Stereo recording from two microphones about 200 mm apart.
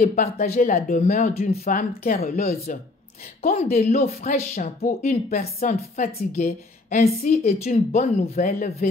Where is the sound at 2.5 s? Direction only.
50° left (ahead or behind).